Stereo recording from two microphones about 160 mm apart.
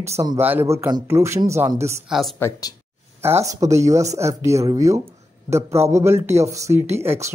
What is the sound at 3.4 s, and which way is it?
Speech, 45° right (ahead or behind).